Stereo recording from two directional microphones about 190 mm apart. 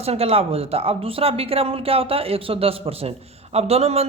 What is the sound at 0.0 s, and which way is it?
Speech, 30° right (ahead or behind).